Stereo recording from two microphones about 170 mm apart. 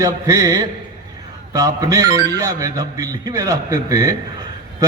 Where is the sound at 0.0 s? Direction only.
20° right (ahead or behind).